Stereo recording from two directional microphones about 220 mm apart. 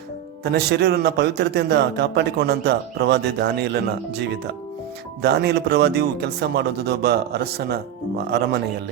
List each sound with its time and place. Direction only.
0.4 s a man's voice: 50° right (ahead or behind)
5.2 s a man's voice: 50° right (ahead or behind)